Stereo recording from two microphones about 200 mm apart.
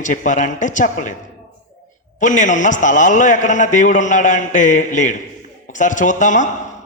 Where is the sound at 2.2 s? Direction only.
40° left (ahead or behind).